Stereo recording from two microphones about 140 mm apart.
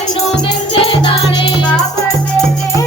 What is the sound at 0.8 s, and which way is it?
Music, 40° left (ahead or behind).